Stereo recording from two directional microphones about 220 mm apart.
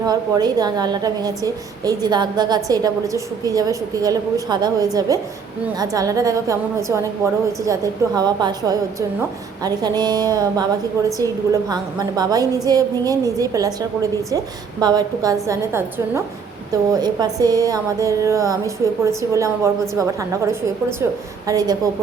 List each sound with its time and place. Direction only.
0.0 s a woman's voice: 15° right (ahead or behind)